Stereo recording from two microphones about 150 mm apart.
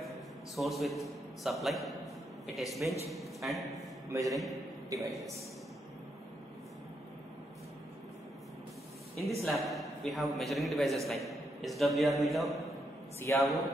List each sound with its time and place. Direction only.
0.6 s a man's voice: centre (ahead or behind)
4.9 s a man's voice: 25° right (ahead or behind)
9.4 s a man's voice: centre (ahead or behind)
13.2 s a man's voice: 20° left (ahead or behind)